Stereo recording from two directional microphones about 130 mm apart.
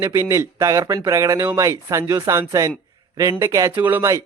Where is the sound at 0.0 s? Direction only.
20° right (ahead or behind).